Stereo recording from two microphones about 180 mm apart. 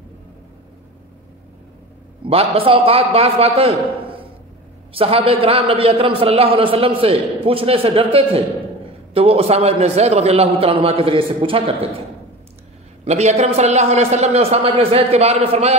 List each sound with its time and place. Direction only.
2.2 s a man's voice: 30° right (ahead or behind)
13.0 s a man's voice: 40° right (ahead or behind)